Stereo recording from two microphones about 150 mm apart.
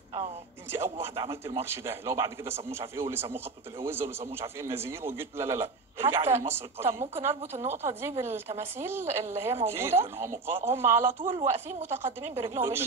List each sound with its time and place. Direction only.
1.1 s a man's voice: 35° right (ahead or behind)
1.6 s a man's voice: 15° right (ahead or behind)